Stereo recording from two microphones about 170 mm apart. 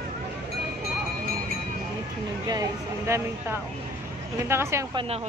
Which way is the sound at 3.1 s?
15° right (ahead or behind).